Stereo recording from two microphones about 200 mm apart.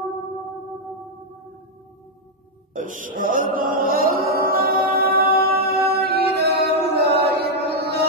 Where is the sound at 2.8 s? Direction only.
40° right (ahead or behind).